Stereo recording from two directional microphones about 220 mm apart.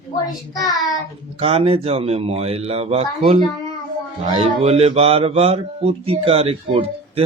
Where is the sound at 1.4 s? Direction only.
25° right (ahead or behind).